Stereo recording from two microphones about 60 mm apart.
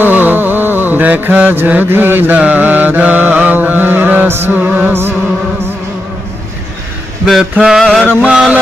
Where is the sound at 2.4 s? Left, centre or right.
Right.